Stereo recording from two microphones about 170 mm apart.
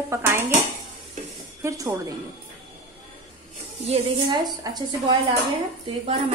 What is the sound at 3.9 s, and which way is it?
Speech, 30° right (ahead or behind).